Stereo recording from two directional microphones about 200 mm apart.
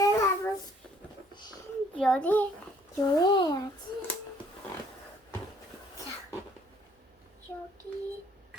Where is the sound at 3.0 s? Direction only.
20° left (ahead or behind).